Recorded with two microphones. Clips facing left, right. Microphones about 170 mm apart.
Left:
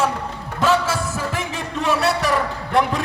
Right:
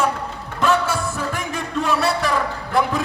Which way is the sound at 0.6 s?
5° left (ahead or behind).